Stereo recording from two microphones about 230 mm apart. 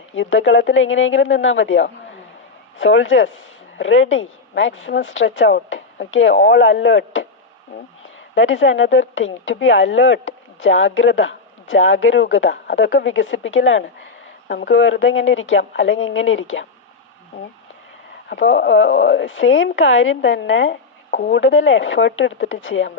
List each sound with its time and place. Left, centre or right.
0.2 s speech: left
8.4 s speech: left
18.3 s speech: left